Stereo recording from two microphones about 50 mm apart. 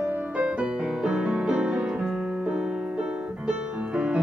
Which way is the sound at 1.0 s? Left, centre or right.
Centre.